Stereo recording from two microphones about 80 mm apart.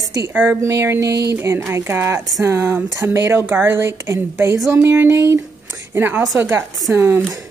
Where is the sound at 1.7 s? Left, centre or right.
Right.